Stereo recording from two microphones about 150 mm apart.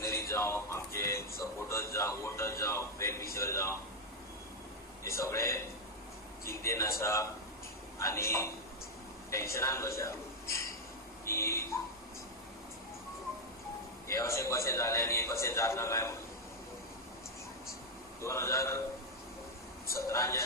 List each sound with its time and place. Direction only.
0.0 s speech: 20° left (ahead or behind)
1.4 s a sound: 20° left (ahead or behind)
5.0 s a man's voice: 20° left (ahead or behind)
11.3 s a man's voice: 20° left (ahead or behind)
14.1 s a man's voice: 20° left (ahead or behind)
18.2 s a man's voice: 20° left (ahead or behind)
19.9 s a man's voice: 20° left (ahead or behind)